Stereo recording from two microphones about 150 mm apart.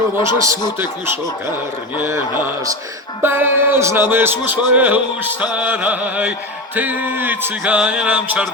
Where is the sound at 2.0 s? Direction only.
15° right (ahead or behind).